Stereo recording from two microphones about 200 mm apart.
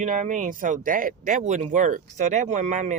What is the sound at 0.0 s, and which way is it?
Speech, 40° right (ahead or behind).